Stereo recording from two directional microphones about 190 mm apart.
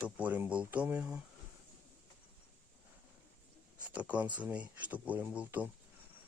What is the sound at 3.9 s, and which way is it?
Speech, 5° right (ahead or behind).